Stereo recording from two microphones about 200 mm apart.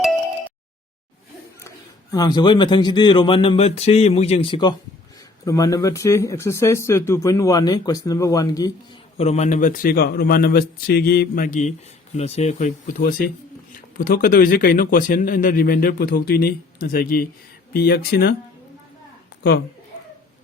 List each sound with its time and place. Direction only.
2.1 s speech: 20° left (ahead or behind)
9.1 s speech: 35° left (ahead or behind)
12.1 s speech: 30° left (ahead or behind); by 18.3 s 50° left (ahead or behind)